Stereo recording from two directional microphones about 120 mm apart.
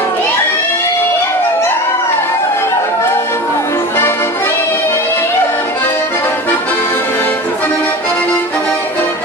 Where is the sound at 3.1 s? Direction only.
20° left (ahead or behind).